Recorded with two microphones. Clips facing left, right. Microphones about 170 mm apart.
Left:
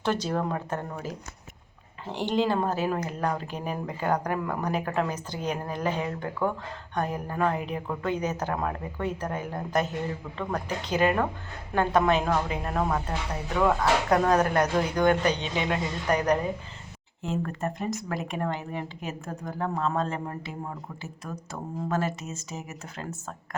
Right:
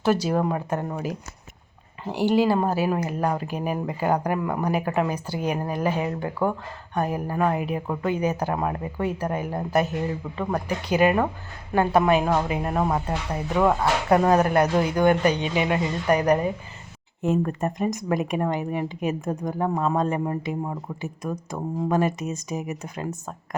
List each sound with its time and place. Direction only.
0.0 s speech: 10° right (ahead or behind)